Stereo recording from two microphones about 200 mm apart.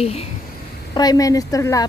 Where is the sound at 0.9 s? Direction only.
20° left (ahead or behind).